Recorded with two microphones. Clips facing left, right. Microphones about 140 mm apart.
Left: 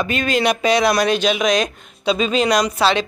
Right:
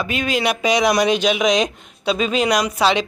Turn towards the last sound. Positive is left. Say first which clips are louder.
# left 1 dB
turn(degrees=-15)  # may be behind; listen again after turning